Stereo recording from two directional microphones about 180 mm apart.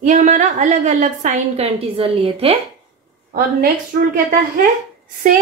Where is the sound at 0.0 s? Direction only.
40° right (ahead or behind).